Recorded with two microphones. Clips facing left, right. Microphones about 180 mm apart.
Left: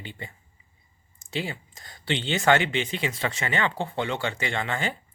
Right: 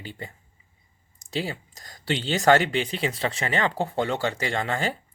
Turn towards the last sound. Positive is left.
turn(degrees=-40)  # may be behind; listen again after turning